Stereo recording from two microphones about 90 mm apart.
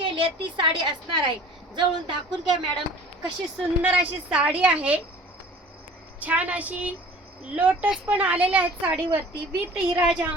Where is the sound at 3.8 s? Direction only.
15° right (ahead or behind).